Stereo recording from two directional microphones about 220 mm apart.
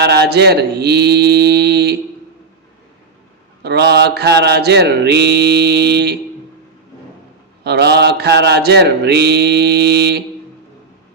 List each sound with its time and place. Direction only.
0.0 s mantra: 45° right (ahead or behind)
3.6 s mantra: 45° right (ahead or behind)
7.6 s mantra: 50° right (ahead or behind)